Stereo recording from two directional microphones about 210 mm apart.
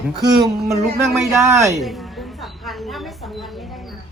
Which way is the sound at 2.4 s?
Centre (ahead or behind).